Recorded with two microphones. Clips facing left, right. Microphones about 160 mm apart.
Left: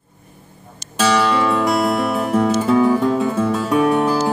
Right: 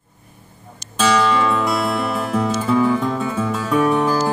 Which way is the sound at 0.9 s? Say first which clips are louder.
Even; 10° left (ahead or behind).